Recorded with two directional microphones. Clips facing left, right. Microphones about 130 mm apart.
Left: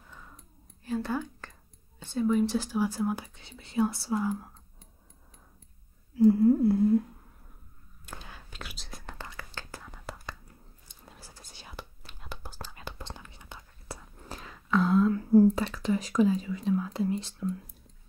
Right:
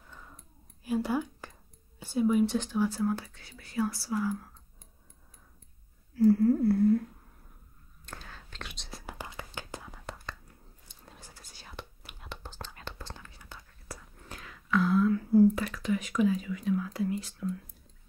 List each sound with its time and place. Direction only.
0.8 s whispering: 10° right (ahead or behind)
2.0 s speech: 10° right (ahead or behind)
2.4 s speech: 5° left (ahead or behind); by 4.5 s 25° left (ahead or behind)
6.1 s speech: 20° left (ahead or behind)
8.0 s whispering: 10° left (ahead or behind); by 9.8 s 15° right (ahead or behind)
9.8 s whispering: centre (ahead or behind)
13.0 s whispering: 20° left (ahead or behind)
15.3 s speech: 35° left (ahead or behind)